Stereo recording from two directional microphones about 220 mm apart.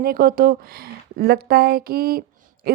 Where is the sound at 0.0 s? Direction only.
40° right (ahead or behind).